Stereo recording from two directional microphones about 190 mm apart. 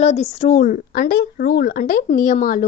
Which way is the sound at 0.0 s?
35° left (ahead or behind).